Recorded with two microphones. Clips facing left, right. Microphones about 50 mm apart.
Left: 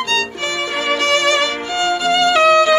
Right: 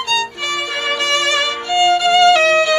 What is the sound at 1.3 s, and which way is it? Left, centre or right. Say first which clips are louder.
Violin: right 1 dB; centre.